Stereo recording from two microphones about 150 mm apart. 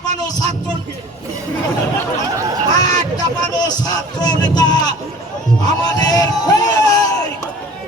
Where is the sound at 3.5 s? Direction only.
25° left (ahead or behind).